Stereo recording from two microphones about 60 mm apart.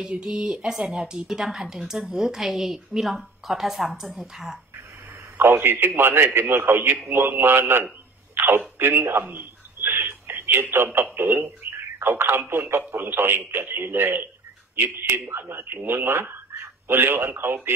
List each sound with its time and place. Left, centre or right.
0.0 s speech: centre
5.4 s speech: right
9.2 s a sound: right
10.2 s speech: right